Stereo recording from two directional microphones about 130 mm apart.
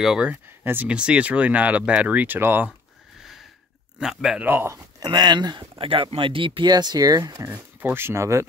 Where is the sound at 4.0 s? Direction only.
5° right (ahead or behind).